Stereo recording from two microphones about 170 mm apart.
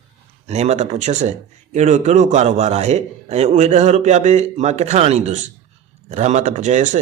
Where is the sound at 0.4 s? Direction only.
40° right (ahead or behind).